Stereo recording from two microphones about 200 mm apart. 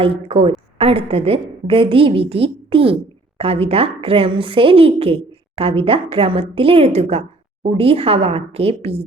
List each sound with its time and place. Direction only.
0.0 s a woman's voice: 25° right (ahead or behind)